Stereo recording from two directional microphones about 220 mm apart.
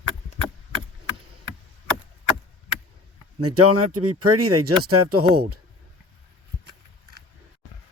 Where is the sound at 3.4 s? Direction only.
90° right.